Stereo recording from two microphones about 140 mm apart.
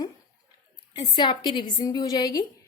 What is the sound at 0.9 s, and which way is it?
Speech, 30° left (ahead or behind).